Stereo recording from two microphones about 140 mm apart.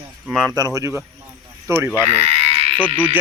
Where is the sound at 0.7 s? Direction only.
20° right (ahead or behind).